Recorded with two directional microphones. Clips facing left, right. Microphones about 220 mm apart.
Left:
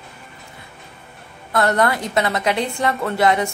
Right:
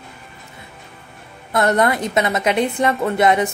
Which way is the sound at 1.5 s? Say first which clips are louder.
Right 1 dB; 20° right (ahead or behind).